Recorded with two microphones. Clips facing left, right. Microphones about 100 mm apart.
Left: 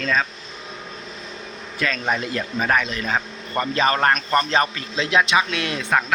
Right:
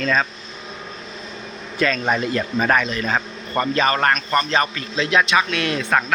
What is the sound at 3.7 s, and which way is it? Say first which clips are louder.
Speech: left 1 dB; 25° left (ahead or behind).